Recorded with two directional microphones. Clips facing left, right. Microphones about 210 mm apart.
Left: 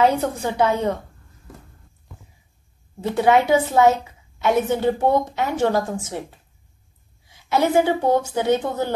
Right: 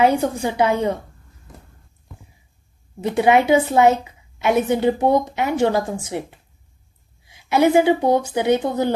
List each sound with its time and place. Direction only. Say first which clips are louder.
0.0 s a woman's voice: right 2 dB; 10° right (ahead or behind)
3.0 s a woman's voice: right 1 dB; 15° right (ahead or behind)
7.2 s a woman's voice: right 4 dB; 15° right (ahead or behind)